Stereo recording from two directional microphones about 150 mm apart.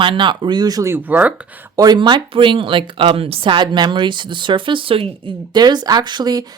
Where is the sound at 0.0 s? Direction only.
30° right (ahead or behind); by 1.3 s 10° right (ahead or behind).